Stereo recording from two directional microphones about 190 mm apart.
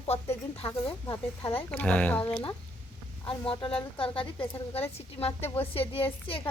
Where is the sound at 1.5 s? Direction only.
10° left (ahead or behind).